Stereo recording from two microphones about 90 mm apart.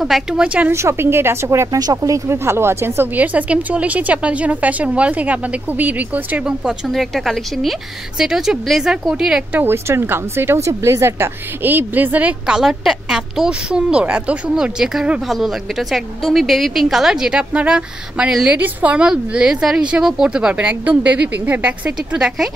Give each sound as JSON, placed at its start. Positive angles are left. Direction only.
{"t": 0.0, "sound": "a woman's voice", "side_deg": -5}
{"t": 0.7, "sound": "speech", "side_deg": -30}
{"t": 6.9, "sound": "a woman's voice", "side_deg": 0}
{"t": 9.6, "sound": "a woman's voice", "side_deg": -30}